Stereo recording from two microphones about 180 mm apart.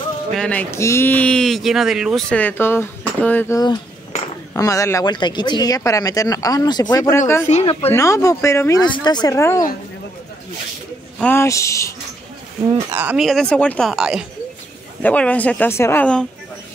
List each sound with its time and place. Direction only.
0.4 s speech: 10° left (ahead or behind)
7.4 s speech: 35° left (ahead or behind)
7.9 s speech: 15° left (ahead or behind)
11.1 s speech: 10° left (ahead or behind)
12.9 s speech: 10° right (ahead or behind)
15.0 s speech: 5° left (ahead or behind)